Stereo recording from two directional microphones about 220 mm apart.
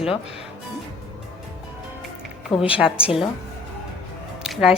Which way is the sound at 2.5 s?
25° left (ahead or behind).